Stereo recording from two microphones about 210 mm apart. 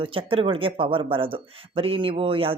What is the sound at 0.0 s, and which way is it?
A woman's voice, 25° right (ahead or behind).